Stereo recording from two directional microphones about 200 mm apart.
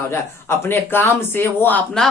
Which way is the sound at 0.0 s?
15° left (ahead or behind).